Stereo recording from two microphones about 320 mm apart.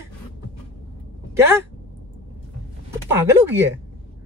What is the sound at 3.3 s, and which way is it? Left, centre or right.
Speech, centre.